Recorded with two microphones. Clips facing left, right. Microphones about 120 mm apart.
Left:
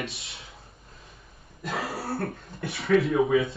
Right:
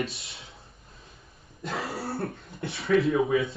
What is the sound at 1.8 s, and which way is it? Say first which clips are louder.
Cough: even; centre (ahead or behind).